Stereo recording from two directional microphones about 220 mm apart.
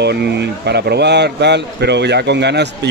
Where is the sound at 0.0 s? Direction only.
50° right (ahead or behind).